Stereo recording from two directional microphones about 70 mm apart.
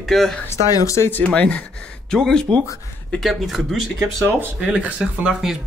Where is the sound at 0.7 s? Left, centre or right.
Left.